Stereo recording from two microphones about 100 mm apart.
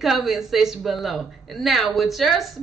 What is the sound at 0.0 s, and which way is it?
A woman's voice, centre (ahead or behind).